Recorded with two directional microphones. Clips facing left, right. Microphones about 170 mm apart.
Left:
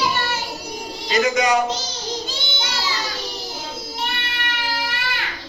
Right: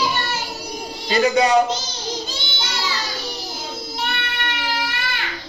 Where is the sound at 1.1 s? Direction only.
30° right (ahead or behind).